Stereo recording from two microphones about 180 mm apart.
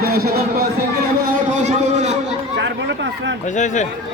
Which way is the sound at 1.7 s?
40° right (ahead or behind).